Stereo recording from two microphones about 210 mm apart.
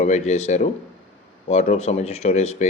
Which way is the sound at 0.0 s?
30° left (ahead or behind).